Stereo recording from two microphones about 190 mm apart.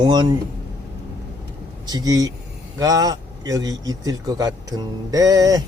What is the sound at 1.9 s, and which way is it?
A man's voice, 20° right (ahead or behind).